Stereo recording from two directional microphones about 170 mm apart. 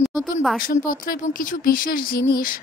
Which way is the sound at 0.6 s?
55° left (ahead or behind).